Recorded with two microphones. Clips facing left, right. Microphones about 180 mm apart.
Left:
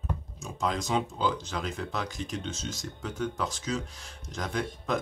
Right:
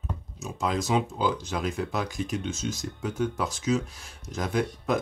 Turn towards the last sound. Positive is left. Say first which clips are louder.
# right 5 dB
turn(degrees=-10)  # may be behind; listen again after turning